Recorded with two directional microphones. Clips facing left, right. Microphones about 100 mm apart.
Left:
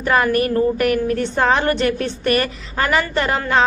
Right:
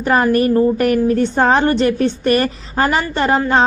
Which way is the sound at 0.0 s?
35° right (ahead or behind).